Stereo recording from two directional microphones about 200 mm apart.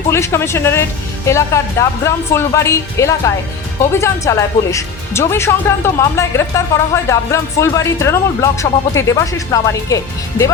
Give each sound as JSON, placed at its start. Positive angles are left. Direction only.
{"t": 0.1, "sound": "speech", "side_deg": 15}